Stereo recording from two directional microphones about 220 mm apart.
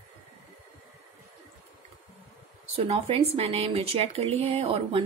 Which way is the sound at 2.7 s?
25° right (ahead or behind).